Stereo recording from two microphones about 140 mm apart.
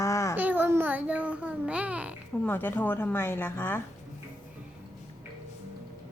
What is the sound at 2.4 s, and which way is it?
A woman's voice, 15° left (ahead or behind).